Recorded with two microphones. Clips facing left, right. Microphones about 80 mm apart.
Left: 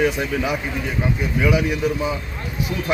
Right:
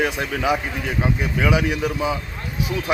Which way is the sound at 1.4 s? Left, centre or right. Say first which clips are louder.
Left 1 dB; right.